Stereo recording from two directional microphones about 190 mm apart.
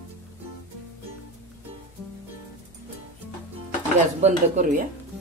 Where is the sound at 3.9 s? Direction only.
40° right (ahead or behind).